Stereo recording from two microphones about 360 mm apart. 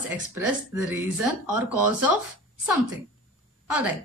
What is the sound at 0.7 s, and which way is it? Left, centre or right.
Speech, centre.